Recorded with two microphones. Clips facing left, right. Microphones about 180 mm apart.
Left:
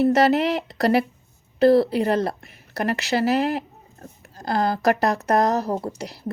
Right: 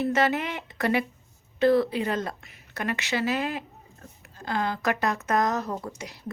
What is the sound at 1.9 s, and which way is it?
Speech, 65° left (ahead or behind).